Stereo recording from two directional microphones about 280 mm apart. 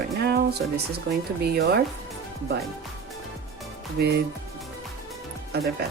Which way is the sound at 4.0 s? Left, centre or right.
Right.